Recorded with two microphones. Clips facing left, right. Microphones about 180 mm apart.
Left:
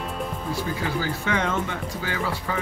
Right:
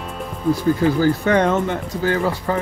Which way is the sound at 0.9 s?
45° right (ahead or behind).